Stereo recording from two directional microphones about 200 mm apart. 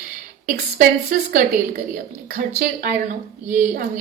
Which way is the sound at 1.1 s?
40° right (ahead or behind).